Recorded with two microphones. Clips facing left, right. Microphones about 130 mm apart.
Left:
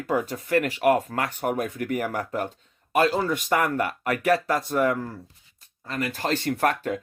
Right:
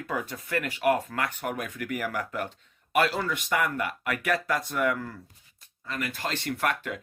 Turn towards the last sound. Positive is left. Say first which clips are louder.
# left 5 dB
turn(degrees=40)  # may be behind; listen again after turning